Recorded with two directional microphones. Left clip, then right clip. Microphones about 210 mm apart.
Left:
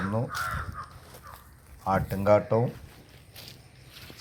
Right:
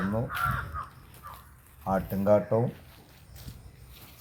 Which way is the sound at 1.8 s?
15° left (ahead or behind).